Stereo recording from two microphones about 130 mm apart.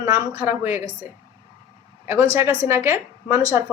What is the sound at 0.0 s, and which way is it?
Speech, 20° right (ahead or behind).